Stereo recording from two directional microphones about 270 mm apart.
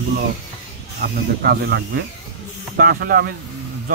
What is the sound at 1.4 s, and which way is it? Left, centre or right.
Speech, right.